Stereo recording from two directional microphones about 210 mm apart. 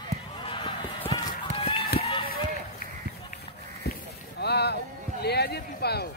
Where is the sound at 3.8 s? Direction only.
50° left (ahead or behind).